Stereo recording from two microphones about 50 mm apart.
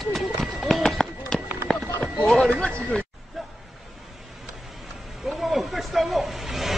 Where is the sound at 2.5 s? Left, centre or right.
Centre.